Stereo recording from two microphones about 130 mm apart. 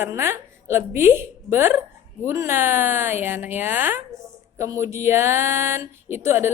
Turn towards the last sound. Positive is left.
turn(degrees=-20)  # may be behind; listen again after turning